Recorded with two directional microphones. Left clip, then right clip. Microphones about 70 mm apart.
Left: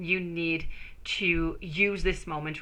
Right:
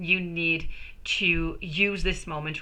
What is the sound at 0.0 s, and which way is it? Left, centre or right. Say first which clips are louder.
A woman's voice: right 4 dB; left.